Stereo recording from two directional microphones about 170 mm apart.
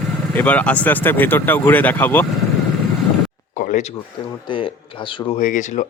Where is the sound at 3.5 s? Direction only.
50° left (ahead or behind).